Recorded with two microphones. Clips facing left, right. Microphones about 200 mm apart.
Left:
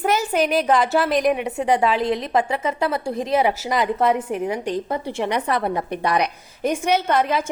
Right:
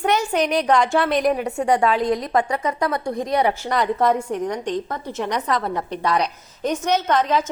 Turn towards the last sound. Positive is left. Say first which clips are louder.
# even
turn(degrees=10)  # may be behind; listen again after turning